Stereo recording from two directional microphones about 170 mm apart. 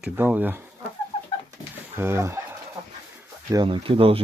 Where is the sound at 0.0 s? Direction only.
10° right (ahead or behind).